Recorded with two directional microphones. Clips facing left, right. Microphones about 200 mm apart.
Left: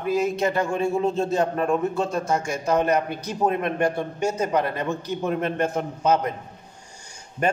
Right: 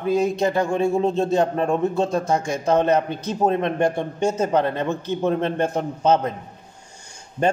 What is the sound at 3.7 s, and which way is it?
A man's voice, 25° right (ahead or behind).